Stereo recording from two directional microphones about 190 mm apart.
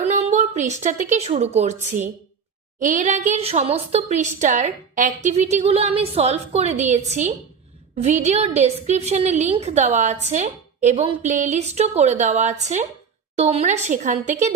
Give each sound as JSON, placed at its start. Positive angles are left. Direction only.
{"t": 0.0, "sound": "a woman's voice", "side_deg": -35}